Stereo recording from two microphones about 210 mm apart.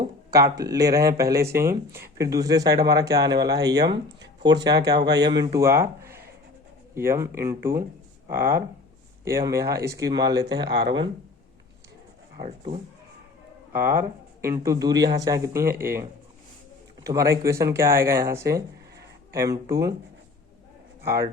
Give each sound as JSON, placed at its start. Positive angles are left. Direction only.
{"t": 0.0, "sound": "speech", "side_deg": -15}
{"t": 13.7, "sound": "speech", "side_deg": -10}
{"t": 17.1, "sound": "speech", "side_deg": -15}
{"t": 21.0, "sound": "a man's voice", "side_deg": -15}